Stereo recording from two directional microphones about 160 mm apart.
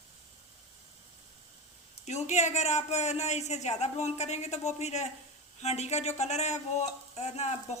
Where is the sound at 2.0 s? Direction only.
45° left (ahead or behind).